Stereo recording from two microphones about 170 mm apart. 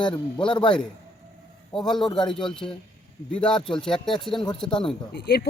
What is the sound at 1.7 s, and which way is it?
Speech, centre (ahead or behind).